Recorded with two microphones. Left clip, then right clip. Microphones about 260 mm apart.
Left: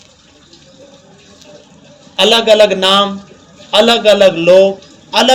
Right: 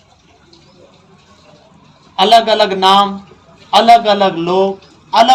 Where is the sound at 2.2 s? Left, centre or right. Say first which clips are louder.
Left 1 dB; right.